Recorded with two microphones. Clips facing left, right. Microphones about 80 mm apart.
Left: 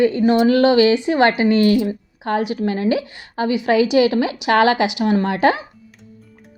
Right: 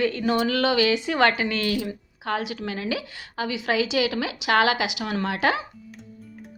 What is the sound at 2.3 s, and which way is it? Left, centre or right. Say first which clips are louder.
A woman's voice: left 9 dB; left.